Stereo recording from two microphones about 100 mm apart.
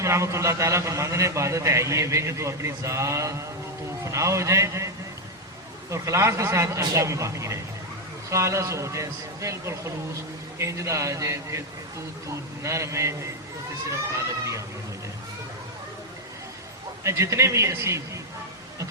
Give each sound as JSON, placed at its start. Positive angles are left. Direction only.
{"t": 0.0, "sound": "a man's voice", "side_deg": -30}
{"t": 5.9, "sound": "a man's voice", "side_deg": -30}
{"t": 12.6, "sound": "a man's voice", "side_deg": -30}
{"t": 17.0, "sound": "a man's voice", "side_deg": -30}